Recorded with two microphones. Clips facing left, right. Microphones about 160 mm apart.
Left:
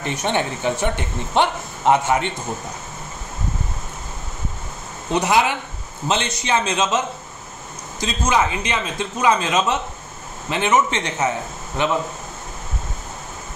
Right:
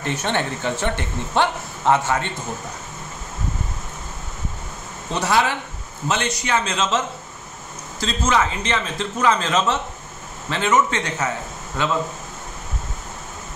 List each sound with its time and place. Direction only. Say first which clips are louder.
0.0 s speech: left 1 dB; 15° left (ahead or behind)
5.1 s a man's voice: left 2 dB; 15° left (ahead or behind)
8.0 s a man's voice: left 1 dB; 15° left (ahead or behind)